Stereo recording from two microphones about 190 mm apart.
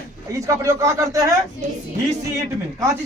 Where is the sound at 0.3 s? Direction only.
15° right (ahead or behind).